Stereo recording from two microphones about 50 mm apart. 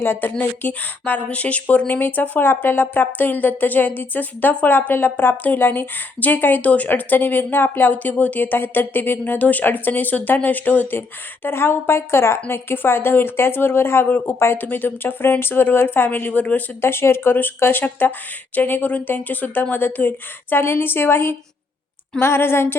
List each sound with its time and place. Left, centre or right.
0.0 s a woman's voice: left
11.4 s speech: left
14.6 s speech: left
16.0 s a woman's voice: left
16.8 s a woman's voice: left